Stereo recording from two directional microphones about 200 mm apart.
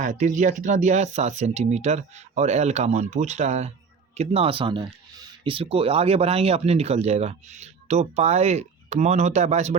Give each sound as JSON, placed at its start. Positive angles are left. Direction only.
{"t": 0.0, "sound": "speech", "side_deg": -40}